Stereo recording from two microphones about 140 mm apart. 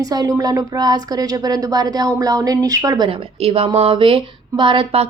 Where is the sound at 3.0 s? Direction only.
45° right (ahead or behind).